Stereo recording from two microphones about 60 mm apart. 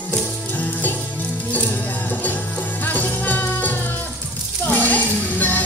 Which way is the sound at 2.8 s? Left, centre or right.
Left.